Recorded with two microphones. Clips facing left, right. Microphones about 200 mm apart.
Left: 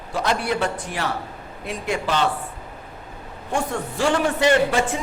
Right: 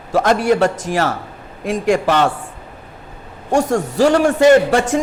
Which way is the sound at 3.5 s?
45° right (ahead or behind).